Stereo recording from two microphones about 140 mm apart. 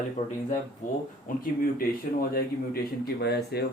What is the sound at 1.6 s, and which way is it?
Speech, 90° left.